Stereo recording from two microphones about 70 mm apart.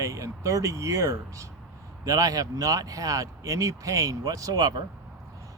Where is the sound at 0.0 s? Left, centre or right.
Right.